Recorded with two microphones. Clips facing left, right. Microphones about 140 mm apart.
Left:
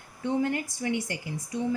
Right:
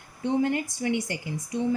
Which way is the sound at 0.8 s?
25° right (ahead or behind).